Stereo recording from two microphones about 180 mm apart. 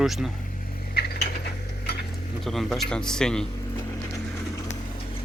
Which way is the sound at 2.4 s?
Centre (ahead or behind).